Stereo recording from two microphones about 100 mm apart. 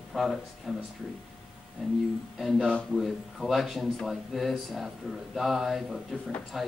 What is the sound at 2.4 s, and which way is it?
Speech, centre (ahead or behind).